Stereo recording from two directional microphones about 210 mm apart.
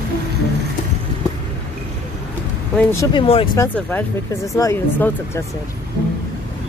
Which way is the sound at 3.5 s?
10° left (ahead or behind).